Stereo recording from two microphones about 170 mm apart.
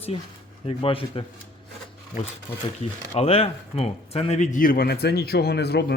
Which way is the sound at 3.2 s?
35° left (ahead or behind).